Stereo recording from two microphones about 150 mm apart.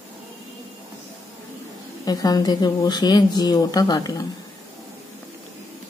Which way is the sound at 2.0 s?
25° left (ahead or behind).